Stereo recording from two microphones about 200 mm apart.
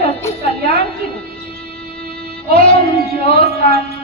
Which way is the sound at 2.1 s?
30° left (ahead or behind).